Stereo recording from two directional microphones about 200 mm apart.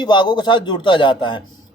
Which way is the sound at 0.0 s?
20° left (ahead or behind).